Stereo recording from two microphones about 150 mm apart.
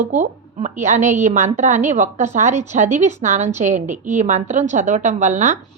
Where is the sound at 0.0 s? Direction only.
55° right (ahead or behind).